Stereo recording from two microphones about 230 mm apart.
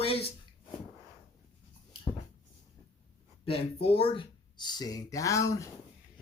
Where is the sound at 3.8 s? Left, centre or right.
Left.